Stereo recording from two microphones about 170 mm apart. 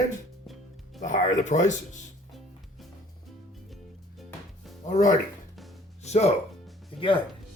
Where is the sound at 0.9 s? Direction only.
45° left (ahead or behind).